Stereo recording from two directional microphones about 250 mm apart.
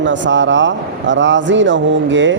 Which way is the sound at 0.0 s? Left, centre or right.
Right.